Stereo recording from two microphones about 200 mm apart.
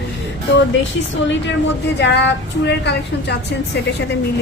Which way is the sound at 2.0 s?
60° left (ahead or behind).